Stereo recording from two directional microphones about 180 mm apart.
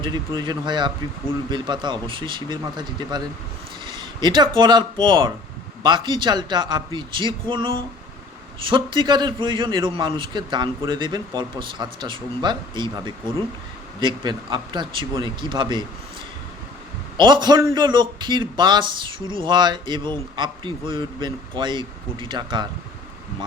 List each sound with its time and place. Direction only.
0.3 s a man's voice: 25° right (ahead or behind)
17.2 s a man's voice: 25° right (ahead or behind)